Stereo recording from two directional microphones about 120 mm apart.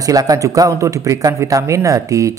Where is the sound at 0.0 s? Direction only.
30° right (ahead or behind).